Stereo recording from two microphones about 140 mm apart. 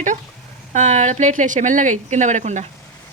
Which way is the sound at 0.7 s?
60° right (ahead or behind).